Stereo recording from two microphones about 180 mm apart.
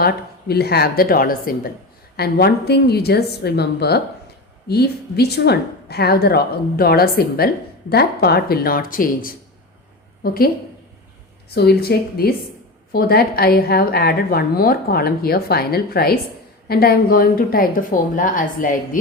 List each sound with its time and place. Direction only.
0.0 s a woman's voice: 60° left (ahead or behind)
11.5 s a woman's voice: 65° left (ahead or behind)